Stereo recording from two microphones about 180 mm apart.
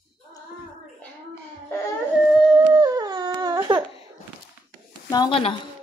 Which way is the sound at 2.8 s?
20° right (ahead or behind).